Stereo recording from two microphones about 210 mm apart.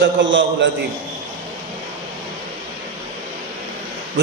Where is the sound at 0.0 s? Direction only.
60° right (ahead or behind).